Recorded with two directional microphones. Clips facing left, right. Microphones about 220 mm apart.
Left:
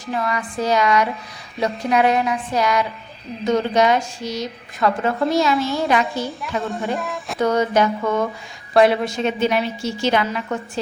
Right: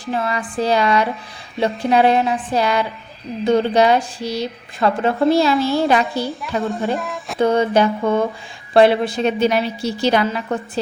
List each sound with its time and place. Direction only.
0.0 s a woman's voice: 30° right (ahead or behind)
6.4 s a woman's voice: centre (ahead or behind)
7.3 s a woman's voice: 30° right (ahead or behind)